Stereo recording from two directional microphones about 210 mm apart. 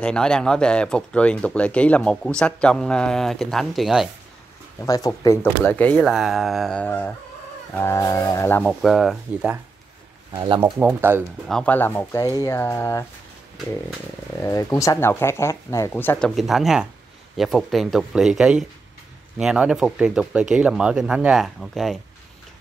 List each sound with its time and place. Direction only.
0.0 s speech: 5° left (ahead or behind)
4.7 s speech: 15° left (ahead or behind)
8.8 s speech: centre (ahead or behind)
10.3 s speech: 20° right (ahead or behind)
10.8 s speech: 10° right (ahead or behind)
11.4 s speech: 5° left (ahead or behind)
14.4 s speech: 15° left (ahead or behind)